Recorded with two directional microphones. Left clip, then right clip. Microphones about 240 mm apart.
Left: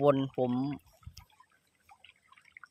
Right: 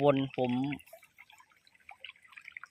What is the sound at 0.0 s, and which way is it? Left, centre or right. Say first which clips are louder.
Speech: left 1 dB; centre.